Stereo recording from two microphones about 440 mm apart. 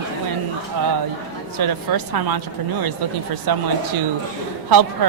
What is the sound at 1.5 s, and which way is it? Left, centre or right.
Speech, right.